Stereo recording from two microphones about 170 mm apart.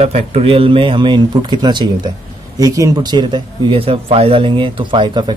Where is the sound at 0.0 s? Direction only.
40° right (ahead or behind).